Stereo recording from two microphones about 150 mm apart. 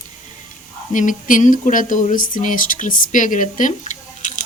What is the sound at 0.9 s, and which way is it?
Speech, 55° left (ahead or behind).